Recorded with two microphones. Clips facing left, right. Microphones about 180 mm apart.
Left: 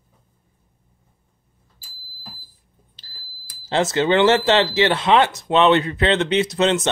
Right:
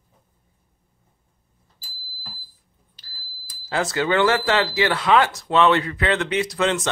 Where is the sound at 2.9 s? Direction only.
25° left (ahead or behind).